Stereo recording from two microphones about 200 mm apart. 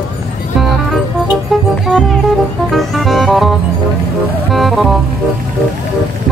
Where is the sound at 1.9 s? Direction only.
Centre (ahead or behind).